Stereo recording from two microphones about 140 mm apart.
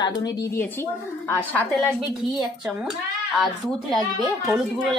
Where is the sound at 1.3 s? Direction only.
10° left (ahead or behind).